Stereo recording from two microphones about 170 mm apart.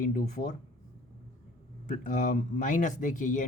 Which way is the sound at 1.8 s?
50° left (ahead or behind).